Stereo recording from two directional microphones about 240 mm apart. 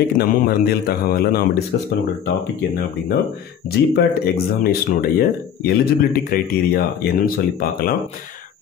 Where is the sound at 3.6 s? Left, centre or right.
Left.